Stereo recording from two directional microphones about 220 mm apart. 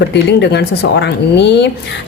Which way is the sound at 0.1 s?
50° left (ahead or behind).